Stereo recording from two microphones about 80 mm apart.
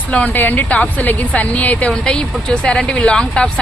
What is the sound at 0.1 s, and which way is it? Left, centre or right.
A woman's voice, centre.